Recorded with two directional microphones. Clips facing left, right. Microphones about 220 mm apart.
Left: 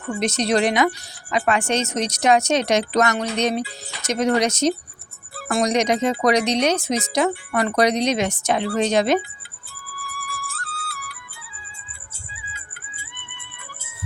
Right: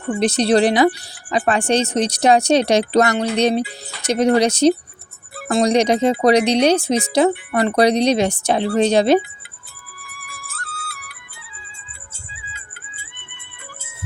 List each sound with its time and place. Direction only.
0.2 s speech: 35° right (ahead or behind)
5.3 s speech: 20° right (ahead or behind)
10.0 s music: 20° right (ahead or behind)
10.4 s music: 30° left (ahead or behind)
12.3 s music: 25° right (ahead or behind)